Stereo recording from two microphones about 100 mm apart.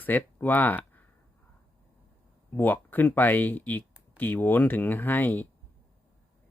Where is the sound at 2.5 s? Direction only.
20° left (ahead or behind).